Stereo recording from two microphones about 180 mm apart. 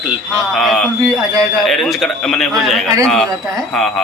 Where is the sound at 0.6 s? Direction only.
Centre (ahead or behind).